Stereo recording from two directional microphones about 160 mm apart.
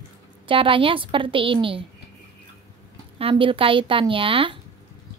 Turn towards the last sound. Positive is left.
turn(degrees=-35)  # may be behind; listen again after turning